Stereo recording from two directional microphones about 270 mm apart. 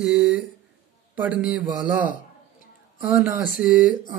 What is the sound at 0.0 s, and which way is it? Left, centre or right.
A man's voice, centre.